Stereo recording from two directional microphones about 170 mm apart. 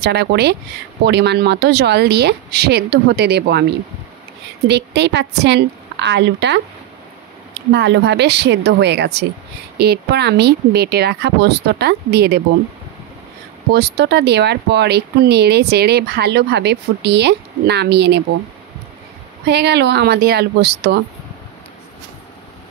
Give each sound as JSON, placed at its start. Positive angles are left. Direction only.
{"t": 0.0, "sound": "speech", "side_deg": -75}
{"t": 4.6, "sound": "a woman's voice", "side_deg": -85}
{"t": 7.7, "sound": "a woman's voice", "side_deg": -90}
{"t": 13.7, "sound": "speech", "side_deg": -70}
{"t": 19.4, "sound": "speech", "side_deg": -80}